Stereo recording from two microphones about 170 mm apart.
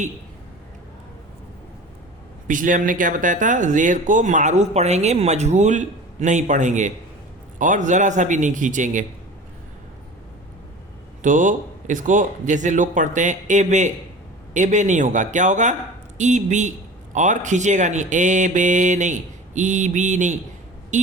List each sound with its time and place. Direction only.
2.5 s speech: 50° right (ahead or behind)
11.2 s speech: 50° right (ahead or behind)